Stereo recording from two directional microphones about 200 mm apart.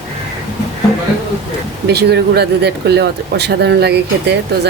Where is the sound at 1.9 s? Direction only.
55° right (ahead or behind).